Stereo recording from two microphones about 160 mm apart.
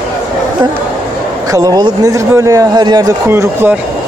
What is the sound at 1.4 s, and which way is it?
Speech, 20° right (ahead or behind).